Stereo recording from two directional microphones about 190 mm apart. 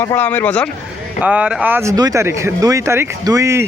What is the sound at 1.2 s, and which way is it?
Speech, 5° right (ahead or behind).